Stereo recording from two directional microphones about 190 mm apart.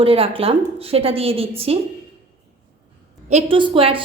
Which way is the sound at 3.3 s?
30° right (ahead or behind).